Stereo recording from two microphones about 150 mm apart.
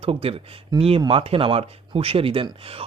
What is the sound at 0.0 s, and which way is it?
Speech, 40° right (ahead or behind).